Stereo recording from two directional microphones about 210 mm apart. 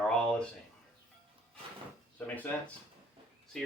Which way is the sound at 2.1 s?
5° left (ahead or behind).